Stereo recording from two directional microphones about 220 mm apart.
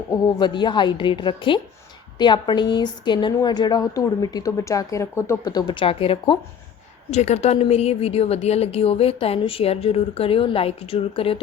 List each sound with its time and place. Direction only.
0.1 s a woman's voice: 20° left (ahead or behind)